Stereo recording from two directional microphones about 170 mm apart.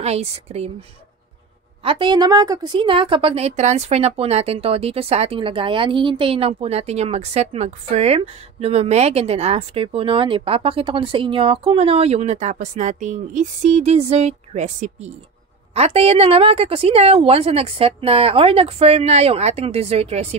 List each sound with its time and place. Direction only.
0.0 s a woman's voice: 40° right (ahead or behind)
1.8 s a woman's voice: 30° right (ahead or behind)